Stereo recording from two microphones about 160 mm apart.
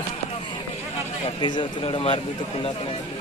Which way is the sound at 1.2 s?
30° left (ahead or behind).